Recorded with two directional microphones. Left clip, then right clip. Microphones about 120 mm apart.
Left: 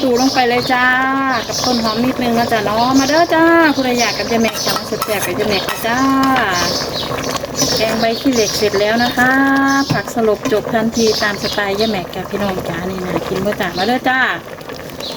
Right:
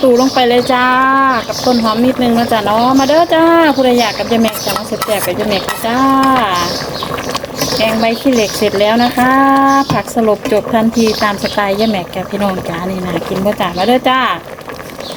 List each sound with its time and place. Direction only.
0.3 s speech: 45° right (ahead or behind)
7.8 s speech: 40° right (ahead or behind)
13.6 s speech: 45° right (ahead or behind)